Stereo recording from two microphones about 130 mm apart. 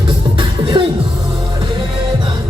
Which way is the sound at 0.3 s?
40° right (ahead or behind).